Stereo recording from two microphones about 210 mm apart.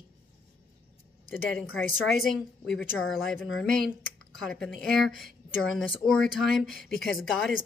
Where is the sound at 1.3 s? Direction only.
10° left (ahead or behind).